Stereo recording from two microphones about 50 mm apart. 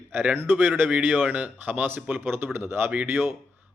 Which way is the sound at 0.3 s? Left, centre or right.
Right.